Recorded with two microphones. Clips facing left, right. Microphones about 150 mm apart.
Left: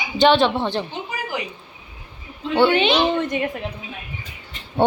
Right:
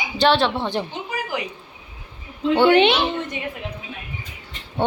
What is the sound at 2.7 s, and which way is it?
Speech, 65° right (ahead or behind).